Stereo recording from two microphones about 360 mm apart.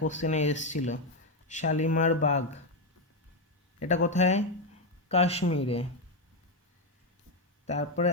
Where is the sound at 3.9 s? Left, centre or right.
Centre.